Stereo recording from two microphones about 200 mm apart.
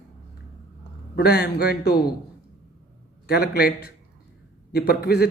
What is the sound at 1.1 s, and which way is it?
Speech, 50° left (ahead or behind).